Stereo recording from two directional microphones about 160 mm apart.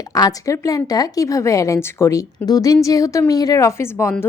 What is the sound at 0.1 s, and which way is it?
A woman's voice, 20° left (ahead or behind).